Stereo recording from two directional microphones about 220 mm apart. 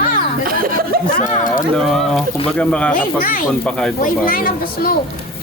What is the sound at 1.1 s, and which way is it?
Chatter, 35° left (ahead or behind).